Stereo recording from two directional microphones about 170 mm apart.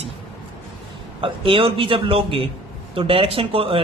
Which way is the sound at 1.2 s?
30° right (ahead or behind).